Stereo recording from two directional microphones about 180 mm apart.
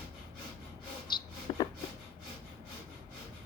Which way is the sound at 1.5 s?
25° left (ahead or behind).